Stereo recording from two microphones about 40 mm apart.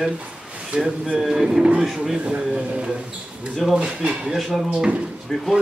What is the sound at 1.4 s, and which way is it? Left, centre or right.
Speech, centre.